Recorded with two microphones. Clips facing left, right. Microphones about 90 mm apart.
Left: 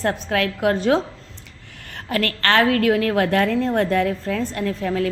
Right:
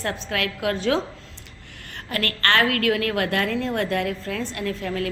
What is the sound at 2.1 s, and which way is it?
Speech, 45° right (ahead or behind).